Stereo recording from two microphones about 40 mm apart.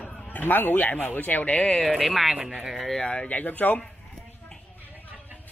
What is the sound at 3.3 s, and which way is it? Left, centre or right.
Speech, left.